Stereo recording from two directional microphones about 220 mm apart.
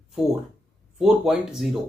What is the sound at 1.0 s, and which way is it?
Speech, centre (ahead or behind).